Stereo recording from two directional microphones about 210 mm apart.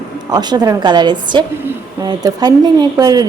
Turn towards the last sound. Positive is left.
turn(degrees=-20)  # may be behind; listen again after turning